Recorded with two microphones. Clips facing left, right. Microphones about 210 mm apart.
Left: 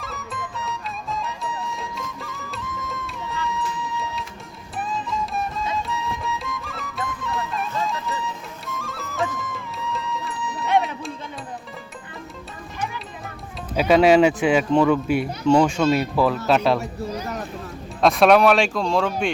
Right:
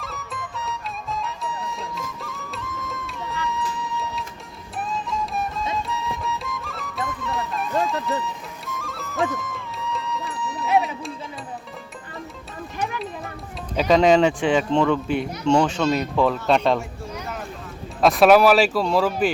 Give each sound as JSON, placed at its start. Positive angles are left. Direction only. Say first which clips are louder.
{"t": 0.0, "sound": "music", "louder": "left 1 dB", "side_deg": 0}
{"t": 13.7, "sound": "speech", "louder": "left 1 dB", "side_deg": 5}
{"t": 17.1, "sound": "a sound", "louder": "left 4 dB", "side_deg": 35}
{"t": 18.0, "sound": "speech", "louder": "right 1 dB", "side_deg": 0}